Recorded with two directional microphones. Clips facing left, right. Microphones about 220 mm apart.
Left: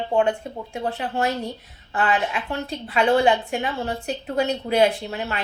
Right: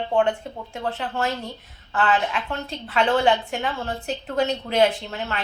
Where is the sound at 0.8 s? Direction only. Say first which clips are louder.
Left 1 dB; 15° left (ahead or behind).